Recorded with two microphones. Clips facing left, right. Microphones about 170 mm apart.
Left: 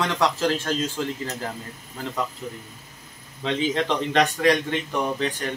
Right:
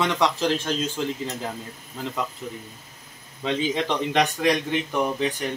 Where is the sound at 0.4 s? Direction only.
15° right (ahead or behind).